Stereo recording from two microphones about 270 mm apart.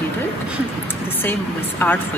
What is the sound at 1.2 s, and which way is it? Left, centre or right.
Speech, centre.